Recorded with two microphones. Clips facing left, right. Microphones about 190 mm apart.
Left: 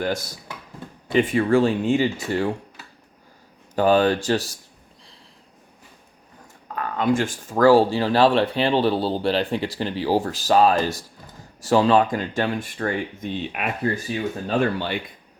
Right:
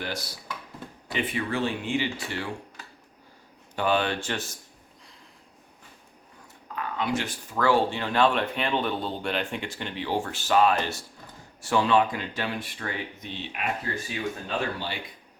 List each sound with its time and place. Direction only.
0.0 s speech: 45° left (ahead or behind)
3.8 s speech: 40° left (ahead or behind)
6.7 s speech: 45° left (ahead or behind)